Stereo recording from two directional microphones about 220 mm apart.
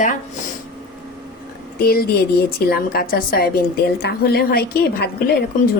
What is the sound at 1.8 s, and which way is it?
A woman's voice, 45° left (ahead or behind).